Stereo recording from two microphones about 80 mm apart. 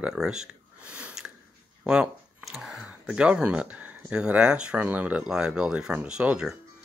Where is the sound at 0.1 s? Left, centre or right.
Centre.